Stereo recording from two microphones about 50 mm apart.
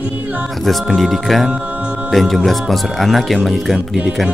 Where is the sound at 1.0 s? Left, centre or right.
Centre.